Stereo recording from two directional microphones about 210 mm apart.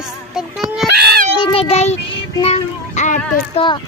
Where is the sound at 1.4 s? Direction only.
25° left (ahead or behind).